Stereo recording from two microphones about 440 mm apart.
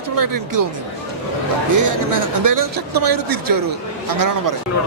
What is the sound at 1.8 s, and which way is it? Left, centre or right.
Speech, right.